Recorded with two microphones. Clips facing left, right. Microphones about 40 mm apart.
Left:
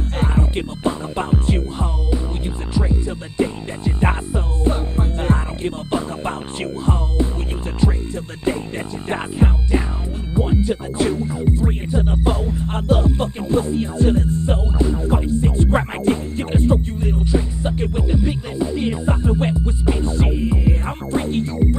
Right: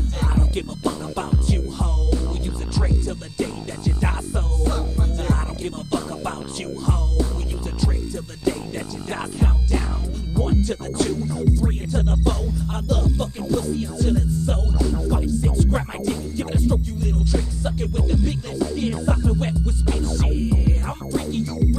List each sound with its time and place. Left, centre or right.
0.2 s music: left
7.8 s music: left
8.5 s speech: left
9.1 s music: left